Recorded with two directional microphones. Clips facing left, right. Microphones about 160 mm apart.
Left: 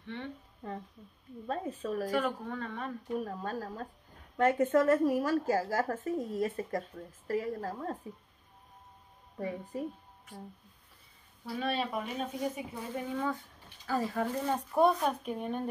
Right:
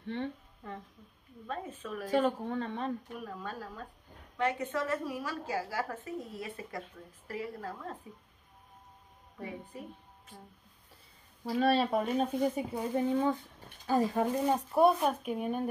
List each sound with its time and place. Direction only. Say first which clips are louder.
0.0 s speech: right 5 dB; 35° right (ahead or behind)
0.6 s a woman's voice: left 3 dB; 30° left (ahead or behind)
2.0 s speech: right 7 dB; 25° right (ahead or behind)
3.2 s a woman's voice: left 5 dB; 40° left (ahead or behind)
9.4 s a woman's voice: left 6 dB; 40° left (ahead or behind)
11.6 s speech: right 6 dB; 35° right (ahead or behind)
12.5 s speech: right 6 dB; 30° right (ahead or behind)
14.7 s speech: even; 5° right (ahead or behind)